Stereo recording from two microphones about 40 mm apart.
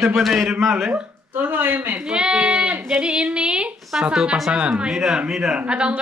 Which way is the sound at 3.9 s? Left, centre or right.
Centre.